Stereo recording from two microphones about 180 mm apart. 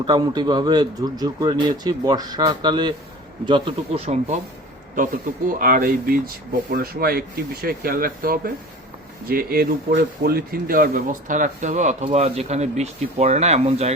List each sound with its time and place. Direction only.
0.0 s speech: 25° right (ahead or behind)
5.5 s speech: 50° right (ahead or behind); by 13.9 s 35° right (ahead or behind)